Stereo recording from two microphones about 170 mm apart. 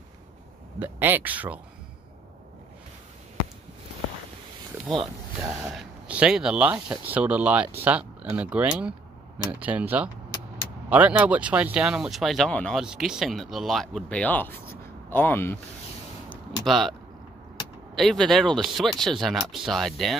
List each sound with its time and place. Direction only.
0.7 s speech: 10° right (ahead or behind)
4.8 s speech: 30° right (ahead or behind)
5.4 s speech: 15° right (ahead or behind); by 15.6 s 15° left (ahead or behind)
16.6 s speech: centre (ahead or behind)
17.9 s speech: centre (ahead or behind)